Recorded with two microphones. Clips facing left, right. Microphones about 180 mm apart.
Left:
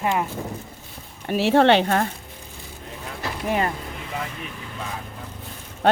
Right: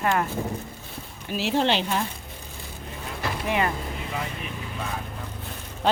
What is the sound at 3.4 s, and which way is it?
Speech, 40° left (ahead or behind).